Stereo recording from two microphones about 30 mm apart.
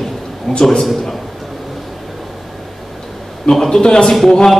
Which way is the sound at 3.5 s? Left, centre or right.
Left.